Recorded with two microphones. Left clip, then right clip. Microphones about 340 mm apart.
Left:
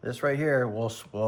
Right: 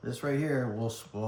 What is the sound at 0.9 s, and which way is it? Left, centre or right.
Speech, left.